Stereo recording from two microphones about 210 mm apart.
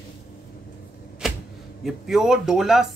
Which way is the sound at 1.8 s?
Centre (ahead or behind).